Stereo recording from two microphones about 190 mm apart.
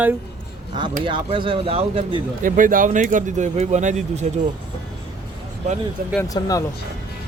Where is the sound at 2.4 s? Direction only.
45° right (ahead or behind).